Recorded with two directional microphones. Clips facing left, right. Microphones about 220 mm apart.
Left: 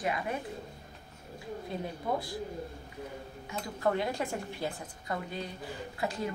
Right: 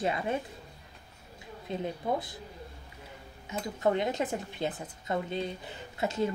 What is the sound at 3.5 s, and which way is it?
Speech, 20° right (ahead or behind).